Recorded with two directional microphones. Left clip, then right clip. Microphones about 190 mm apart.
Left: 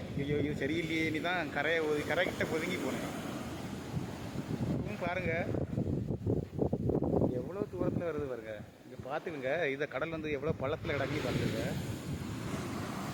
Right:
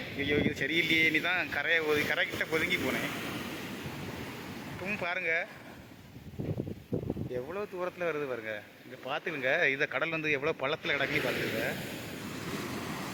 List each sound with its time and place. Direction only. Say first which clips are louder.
0.2 s speech: right 4 dB; centre (ahead or behind)
5.0 s speech: right 3 dB; 5° left (ahead or behind)
7.8 s speech: right 2 dB; 5° right (ahead or behind)
11.1 s speech: right 5 dB; 70° left (ahead or behind)